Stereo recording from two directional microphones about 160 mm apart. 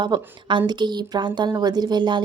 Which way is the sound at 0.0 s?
30° right (ahead or behind).